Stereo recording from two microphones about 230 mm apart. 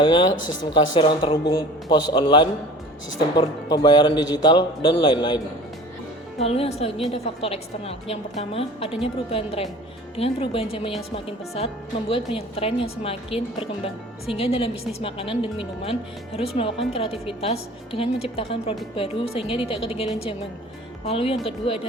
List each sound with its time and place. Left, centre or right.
0.0 s speech: left
6.4 s speech: left